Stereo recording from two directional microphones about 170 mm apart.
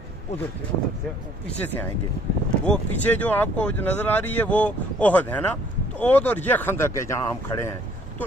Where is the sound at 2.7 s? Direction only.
10° left (ahead or behind).